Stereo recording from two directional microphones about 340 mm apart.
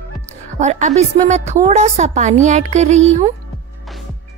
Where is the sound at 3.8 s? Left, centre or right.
Centre.